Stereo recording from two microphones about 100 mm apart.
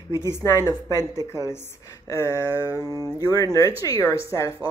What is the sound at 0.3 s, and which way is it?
Speech, 30° left (ahead or behind).